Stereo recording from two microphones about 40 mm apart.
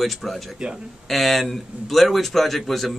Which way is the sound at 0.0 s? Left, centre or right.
Centre.